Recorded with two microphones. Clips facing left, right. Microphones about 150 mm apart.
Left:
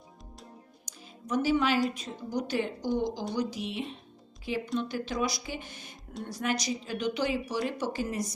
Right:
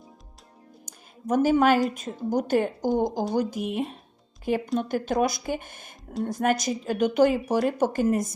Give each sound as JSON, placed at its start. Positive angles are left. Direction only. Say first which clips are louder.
{"t": 0.9, "sound": "music", "louder": "right 7 dB", "side_deg": -50}
{"t": 1.9, "sound": "speech", "louder": "right 7 dB", "side_deg": -50}